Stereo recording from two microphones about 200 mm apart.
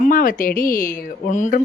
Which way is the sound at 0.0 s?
45° left (ahead or behind).